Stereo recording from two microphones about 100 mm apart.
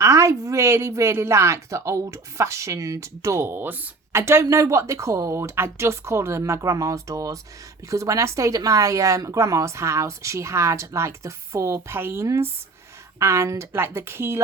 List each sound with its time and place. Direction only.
0.0 s speech: 30° right (ahead or behind)